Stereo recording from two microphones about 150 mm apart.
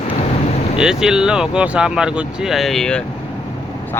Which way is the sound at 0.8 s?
5° right (ahead or behind).